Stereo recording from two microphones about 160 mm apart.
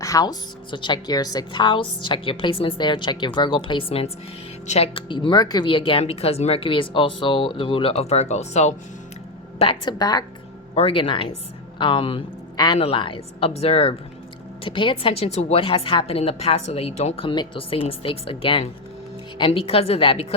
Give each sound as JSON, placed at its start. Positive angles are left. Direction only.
{"t": 0.0, "sound": "a woman's voice", "side_deg": 20}
{"t": 9.6, "sound": "a woman's voice", "side_deg": 30}
{"t": 10.8, "sound": "a woman's voice", "side_deg": 35}